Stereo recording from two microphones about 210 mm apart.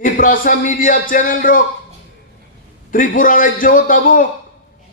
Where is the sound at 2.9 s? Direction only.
40° left (ahead or behind).